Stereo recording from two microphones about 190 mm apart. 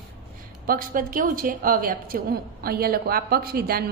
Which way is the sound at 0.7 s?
45° right (ahead or behind).